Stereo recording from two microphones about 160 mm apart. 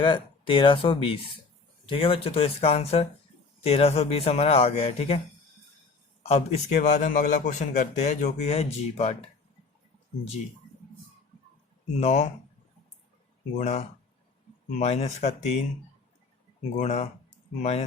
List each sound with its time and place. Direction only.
0.0 s a man's voice: 35° left (ahead or behind)
6.2 s a man's voice: 45° left (ahead or behind)
11.9 s a man's voice: 45° left (ahead or behind)
13.6 s a man's voice: 45° left (ahead or behind)
16.6 s a man's voice: 45° left (ahead or behind)